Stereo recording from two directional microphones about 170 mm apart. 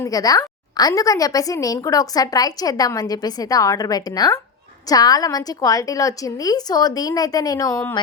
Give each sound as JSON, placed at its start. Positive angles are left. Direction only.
{"t": 0.0, "sound": "a woman's voice", "side_deg": 20}